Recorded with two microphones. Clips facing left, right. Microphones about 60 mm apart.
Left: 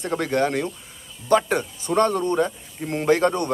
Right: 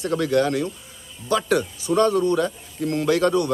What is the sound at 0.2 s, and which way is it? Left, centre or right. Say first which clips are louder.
A man's voice: right 1 dB; left.